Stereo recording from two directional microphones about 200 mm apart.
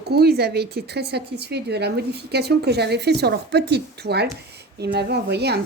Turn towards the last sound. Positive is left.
turn(degrees=-55)  # may be behind; listen again after turning